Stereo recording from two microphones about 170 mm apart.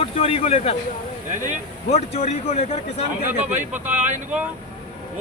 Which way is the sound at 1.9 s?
40° left (ahead or behind).